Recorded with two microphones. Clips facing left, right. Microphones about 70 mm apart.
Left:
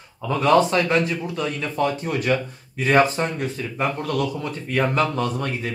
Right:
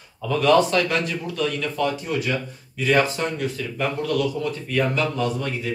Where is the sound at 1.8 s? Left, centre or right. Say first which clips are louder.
Left 2 dB; left.